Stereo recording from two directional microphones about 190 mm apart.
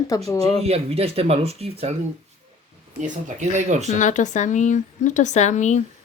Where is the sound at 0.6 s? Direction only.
30° right (ahead or behind).